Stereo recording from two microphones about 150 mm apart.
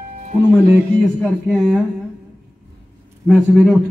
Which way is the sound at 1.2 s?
Centre (ahead or behind).